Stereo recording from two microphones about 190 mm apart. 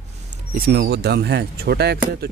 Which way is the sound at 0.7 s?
55° right (ahead or behind).